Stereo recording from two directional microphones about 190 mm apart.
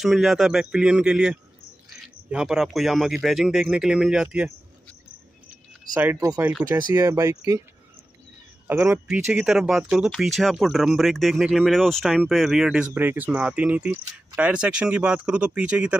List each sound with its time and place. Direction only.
0.0 s speech: centre (ahead or behind)
5.9 s speech: 10° right (ahead or behind)
6.8 s speech: 20° right (ahead or behind)
8.6 s speech: 10° right (ahead or behind)